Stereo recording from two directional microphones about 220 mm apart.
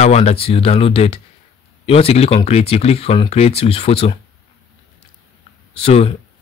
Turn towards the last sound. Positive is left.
turn(degrees=25)  # may be behind; listen again after turning